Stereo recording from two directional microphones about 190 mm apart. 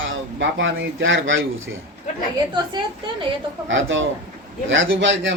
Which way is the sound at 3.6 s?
85° right.